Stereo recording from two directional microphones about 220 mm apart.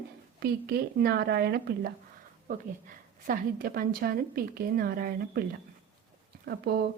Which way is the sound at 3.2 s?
40° right (ahead or behind).